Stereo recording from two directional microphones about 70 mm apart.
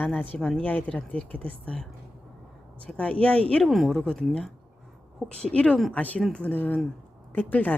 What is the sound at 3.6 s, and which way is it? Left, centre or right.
A woman's voice, centre.